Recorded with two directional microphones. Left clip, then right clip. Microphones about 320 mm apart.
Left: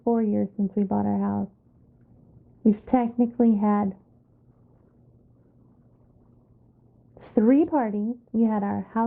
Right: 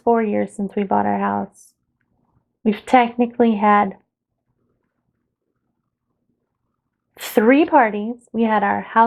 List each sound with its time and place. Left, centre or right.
0.0 s speech: centre
2.6 s speech: centre
7.2 s a woman's voice: centre